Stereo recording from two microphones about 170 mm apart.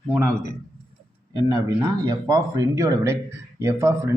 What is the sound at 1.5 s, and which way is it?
Speech, 20° right (ahead or behind).